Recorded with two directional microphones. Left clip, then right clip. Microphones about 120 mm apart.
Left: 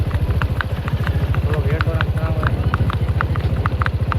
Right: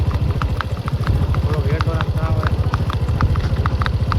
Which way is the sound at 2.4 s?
25° right (ahead or behind).